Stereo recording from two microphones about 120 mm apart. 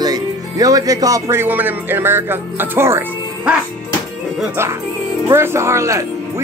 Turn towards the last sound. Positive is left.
turn(degrees=-25)  # may be behind; listen again after turning